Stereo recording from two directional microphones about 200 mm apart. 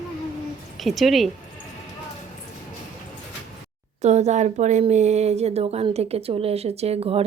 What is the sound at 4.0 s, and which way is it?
Speech, 35° right (ahead or behind).